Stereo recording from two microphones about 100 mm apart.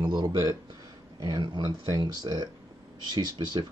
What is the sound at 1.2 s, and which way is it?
Speech, 45° right (ahead or behind).